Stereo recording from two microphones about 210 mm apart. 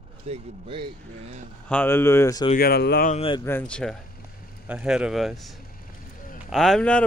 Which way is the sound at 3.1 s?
25° left (ahead or behind).